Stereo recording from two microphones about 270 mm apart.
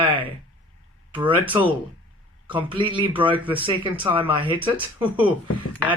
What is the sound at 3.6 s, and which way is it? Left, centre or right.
Speech, centre.